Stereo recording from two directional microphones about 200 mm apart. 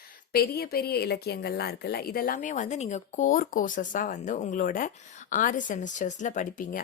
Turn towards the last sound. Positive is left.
turn(degrees=45)  # may be behind; listen again after turning